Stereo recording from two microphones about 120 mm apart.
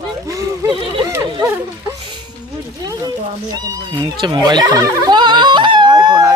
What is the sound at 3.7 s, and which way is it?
Speech, 40° right (ahead or behind).